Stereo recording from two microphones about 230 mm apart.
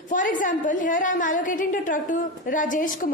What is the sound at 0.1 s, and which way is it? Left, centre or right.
A woman's voice, left.